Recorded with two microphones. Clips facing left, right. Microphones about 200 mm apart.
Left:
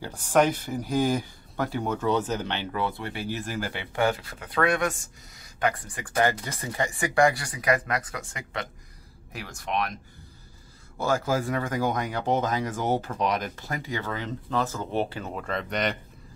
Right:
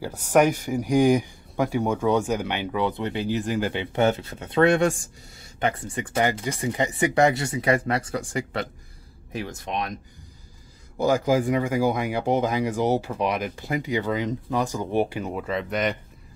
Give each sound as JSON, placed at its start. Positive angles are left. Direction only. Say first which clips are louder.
{"t": 0.0, "sound": "speech", "louder": "right 3 dB", "side_deg": -10}
{"t": 11.0, "sound": "speech", "louder": "right 5 dB", "side_deg": -15}